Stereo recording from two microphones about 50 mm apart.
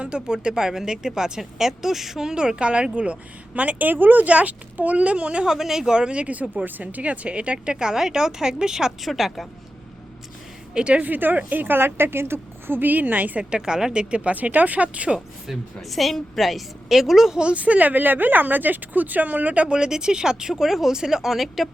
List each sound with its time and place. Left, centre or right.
0.0 s a woman's voice: centre
5.5 s a woman's voice: centre
9.0 s a woman's voice: centre
10.8 s speech: right
12.9 s speech: right
13.4 s speech: centre
14.3 s a woman's voice: right
15.4 s a woman's voice: centre
17.4 s speech: right
19.6 s speech: centre